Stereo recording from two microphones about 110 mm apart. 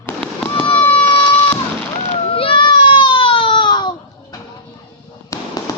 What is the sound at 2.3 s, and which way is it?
Baby cry, 55° left (ahead or behind).